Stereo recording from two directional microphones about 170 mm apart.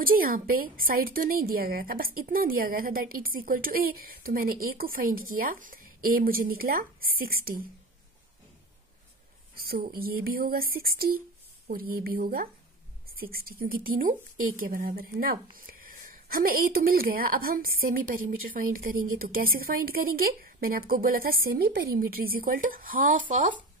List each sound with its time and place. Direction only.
0.0 s a woman's voice: 60° right (ahead or behind)
9.7 s a woman's voice: 65° right (ahead or behind)